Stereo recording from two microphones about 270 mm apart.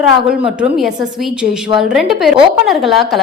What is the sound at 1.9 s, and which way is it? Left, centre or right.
A woman's voice, centre.